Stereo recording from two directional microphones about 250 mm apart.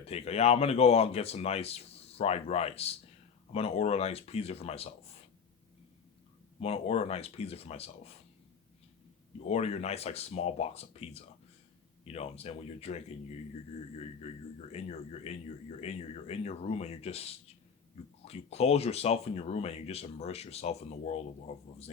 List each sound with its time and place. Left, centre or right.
0.0 s speech: left
6.6 s speech: left
9.5 s speech: left
14.7 s speech: left